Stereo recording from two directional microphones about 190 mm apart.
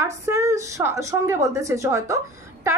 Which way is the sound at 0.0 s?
15° right (ahead or behind).